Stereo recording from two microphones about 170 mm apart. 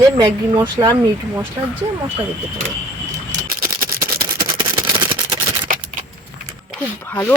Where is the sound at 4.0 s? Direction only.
20° right (ahead or behind).